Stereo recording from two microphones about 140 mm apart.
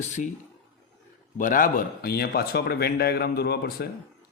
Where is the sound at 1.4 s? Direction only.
80° left.